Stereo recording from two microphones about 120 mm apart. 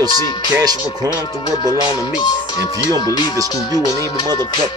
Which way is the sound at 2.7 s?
35° left (ahead or behind).